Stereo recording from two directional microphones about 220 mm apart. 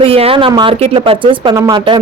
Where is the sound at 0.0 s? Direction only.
25° right (ahead or behind).